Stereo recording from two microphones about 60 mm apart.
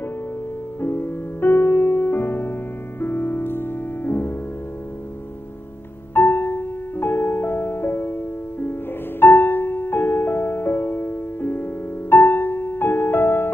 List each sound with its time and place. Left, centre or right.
0.7 s music: left
6.1 s music: left